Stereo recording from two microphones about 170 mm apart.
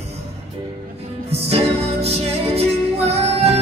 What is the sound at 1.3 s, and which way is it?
Music, 35° right (ahead or behind).